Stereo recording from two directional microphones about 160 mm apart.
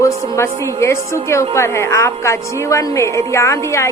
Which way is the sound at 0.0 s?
15° left (ahead or behind).